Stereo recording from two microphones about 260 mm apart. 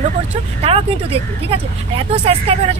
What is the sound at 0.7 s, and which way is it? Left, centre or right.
Speech, right.